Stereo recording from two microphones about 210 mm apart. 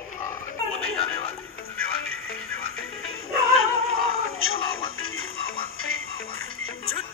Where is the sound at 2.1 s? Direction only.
75° left (ahead or behind).